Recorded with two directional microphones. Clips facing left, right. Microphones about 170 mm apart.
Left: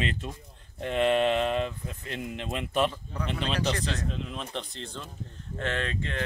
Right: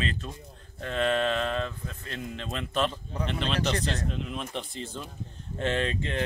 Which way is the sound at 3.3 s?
5° left (ahead or behind).